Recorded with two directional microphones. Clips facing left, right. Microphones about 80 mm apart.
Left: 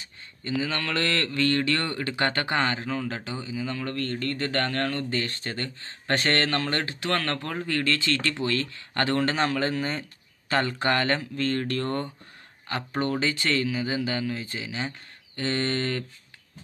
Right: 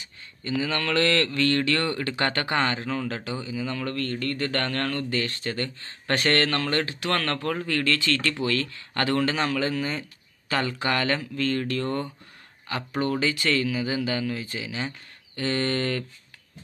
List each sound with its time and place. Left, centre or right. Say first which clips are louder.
0.0 s speech: right 1 dB; left
13.1 s speech: right 2 dB; left